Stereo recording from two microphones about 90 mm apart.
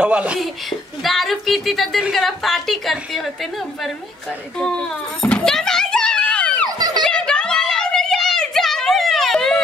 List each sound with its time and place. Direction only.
0.0 s speech: 10° right (ahead or behind)
0.4 s a woman's voice: centre (ahead or behind)
4.6 s a sound: 10° left (ahead or behind)